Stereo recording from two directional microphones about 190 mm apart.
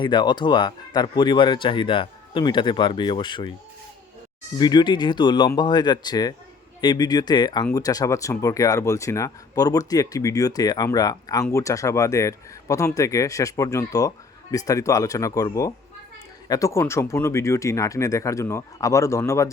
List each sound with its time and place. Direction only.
0.0 s speech: 25° left (ahead or behind)
4.5 s speech: 25° left (ahead or behind)